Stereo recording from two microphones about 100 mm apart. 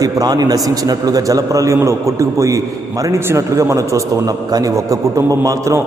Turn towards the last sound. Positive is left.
turn(degrees=-35)  # may be behind; listen again after turning